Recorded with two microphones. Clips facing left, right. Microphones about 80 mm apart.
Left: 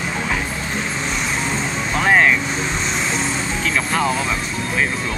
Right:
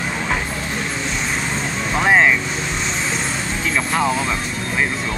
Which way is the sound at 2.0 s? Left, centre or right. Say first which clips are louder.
Even; centre.